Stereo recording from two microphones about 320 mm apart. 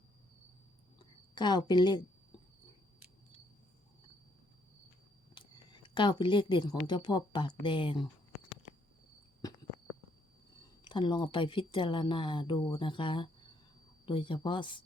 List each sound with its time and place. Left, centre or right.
1.4 s speech: centre
5.3 s a sound: centre
6.8 s speech: centre
10.8 s speech: centre